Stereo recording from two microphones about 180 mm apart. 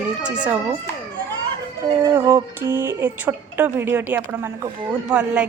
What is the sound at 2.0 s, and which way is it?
A woman's voice, 15° right (ahead or behind).